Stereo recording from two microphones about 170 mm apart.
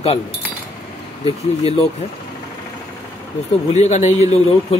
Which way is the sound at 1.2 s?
35° left (ahead or behind).